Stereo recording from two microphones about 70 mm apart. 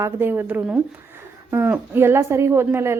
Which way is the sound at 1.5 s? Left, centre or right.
Right.